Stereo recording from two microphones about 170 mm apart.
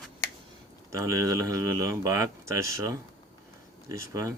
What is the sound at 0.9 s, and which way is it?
Speech, 20° right (ahead or behind).